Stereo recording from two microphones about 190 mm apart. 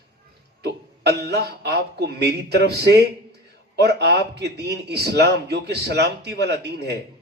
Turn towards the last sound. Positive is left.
turn(degrees=-60)  # may be behind; listen again after turning